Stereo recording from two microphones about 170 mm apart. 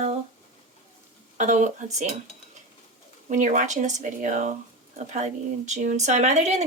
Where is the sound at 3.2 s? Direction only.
45° right (ahead or behind).